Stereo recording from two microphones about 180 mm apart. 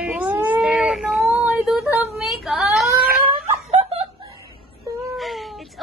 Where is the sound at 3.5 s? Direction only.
35° right (ahead or behind).